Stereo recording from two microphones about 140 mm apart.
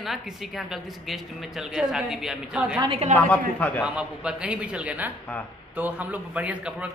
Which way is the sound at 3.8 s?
5° right (ahead or behind).